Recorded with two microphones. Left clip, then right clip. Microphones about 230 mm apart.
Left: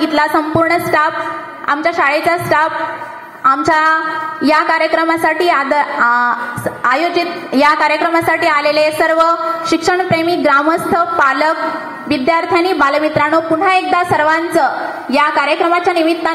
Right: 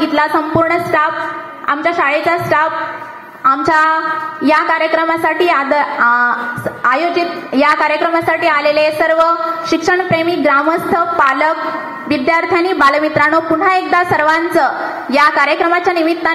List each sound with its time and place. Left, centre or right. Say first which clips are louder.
0.0 s a woman's voice: even; left
6.8 s a sound: even; left
7.2 s a woman's voice: even; left
12.1 s a woman's voice: even; centre